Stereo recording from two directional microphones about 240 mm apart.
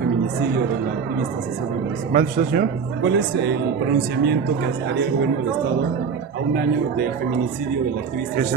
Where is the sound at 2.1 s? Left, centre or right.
Right.